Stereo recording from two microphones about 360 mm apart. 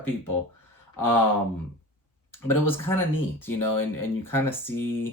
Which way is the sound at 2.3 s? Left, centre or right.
Centre.